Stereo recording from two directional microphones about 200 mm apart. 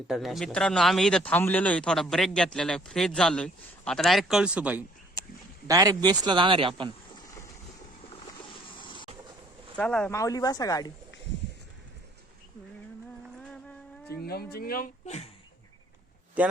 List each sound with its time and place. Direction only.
0.1 s speech: centre (ahead or behind)
5.6 s a man's voice: 15° right (ahead or behind)
8.7 s a sound: 25° left (ahead or behind)
9.7 s speech: 5° left (ahead or behind)
13.4 s a sound: 5° left (ahead or behind)
14.3 s speech: 50° left (ahead or behind); by 15.3 s 35° left (ahead or behind)